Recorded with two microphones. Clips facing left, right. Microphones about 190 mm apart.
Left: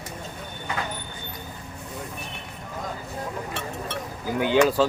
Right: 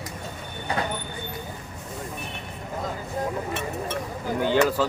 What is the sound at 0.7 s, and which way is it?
Vehicle, 35° right (ahead or behind).